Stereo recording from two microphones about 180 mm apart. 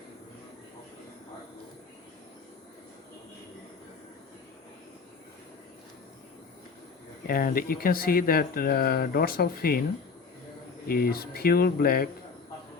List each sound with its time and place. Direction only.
7.3 s speech: 55° left (ahead or behind)
10.8 s speech: 55° left (ahead or behind)